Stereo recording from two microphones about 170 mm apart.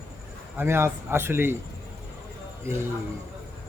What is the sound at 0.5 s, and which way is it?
A man's voice, 15° right (ahead or behind).